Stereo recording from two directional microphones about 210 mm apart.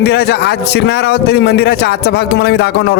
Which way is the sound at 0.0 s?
50° left (ahead or behind).